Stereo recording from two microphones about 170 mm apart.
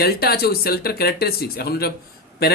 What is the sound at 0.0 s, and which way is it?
Speech, 65° left (ahead or behind).